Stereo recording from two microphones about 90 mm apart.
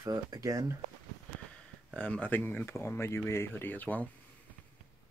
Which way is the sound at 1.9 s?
15° left (ahead or behind).